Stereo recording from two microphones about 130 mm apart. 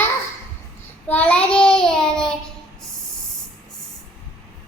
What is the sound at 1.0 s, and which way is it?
A child's voice, 10° left (ahead or behind).